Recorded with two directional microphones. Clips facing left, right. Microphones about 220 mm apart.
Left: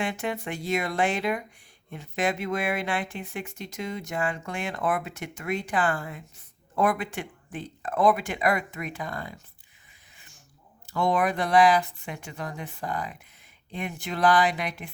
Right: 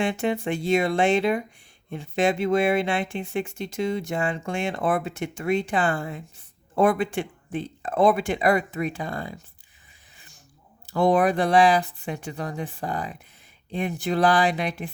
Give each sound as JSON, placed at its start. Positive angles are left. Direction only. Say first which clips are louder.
{"t": 0.0, "sound": "speech", "louder": "right 6 dB", "side_deg": -25}
{"t": 10.2, "sound": "a sound", "louder": "right 2 dB", "side_deg": -35}
{"t": 10.8, "sound": "speech", "louder": "right 5 dB", "side_deg": -35}